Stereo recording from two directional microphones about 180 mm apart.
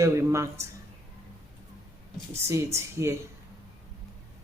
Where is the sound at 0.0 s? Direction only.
15° right (ahead or behind).